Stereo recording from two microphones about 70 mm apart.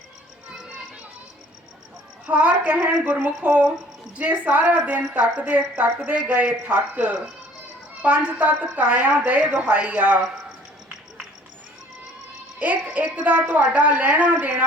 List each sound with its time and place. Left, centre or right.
2.2 s a woman's voice: centre
12.5 s a woman's voice: centre